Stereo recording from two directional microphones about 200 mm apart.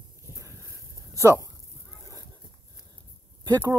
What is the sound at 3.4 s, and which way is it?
Speech, 20° right (ahead or behind).